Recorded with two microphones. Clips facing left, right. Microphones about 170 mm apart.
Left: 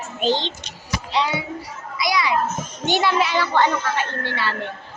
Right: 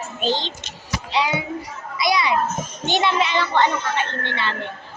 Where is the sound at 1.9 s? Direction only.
25° right (ahead or behind).